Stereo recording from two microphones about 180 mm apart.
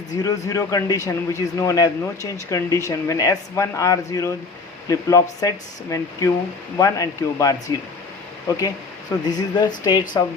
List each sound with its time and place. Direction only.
0.2 s speech: 20° left (ahead or behind)